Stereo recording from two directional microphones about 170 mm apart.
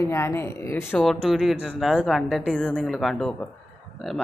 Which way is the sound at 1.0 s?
Centre (ahead or behind).